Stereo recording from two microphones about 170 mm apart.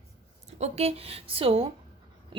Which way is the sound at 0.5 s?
40° right (ahead or behind).